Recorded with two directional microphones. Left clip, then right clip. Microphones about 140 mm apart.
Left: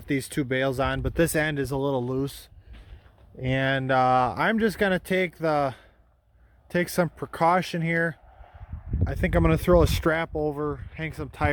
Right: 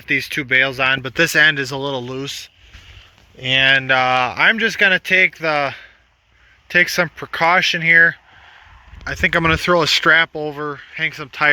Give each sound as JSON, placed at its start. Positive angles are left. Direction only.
{"t": 0.0, "sound": "speech", "side_deg": 35}
{"t": 2.0, "sound": "speech", "side_deg": 40}
{"t": 3.7, "sound": "speech", "side_deg": 30}
{"t": 9.0, "sound": "speech", "side_deg": 15}